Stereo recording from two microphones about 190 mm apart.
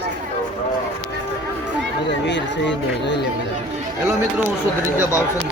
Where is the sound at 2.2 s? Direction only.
65° left (ahead or behind).